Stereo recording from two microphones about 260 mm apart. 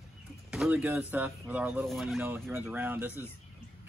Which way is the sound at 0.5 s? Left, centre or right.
Centre.